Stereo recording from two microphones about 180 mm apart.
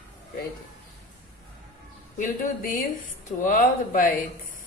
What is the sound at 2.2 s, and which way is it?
Speech, 50° left (ahead or behind).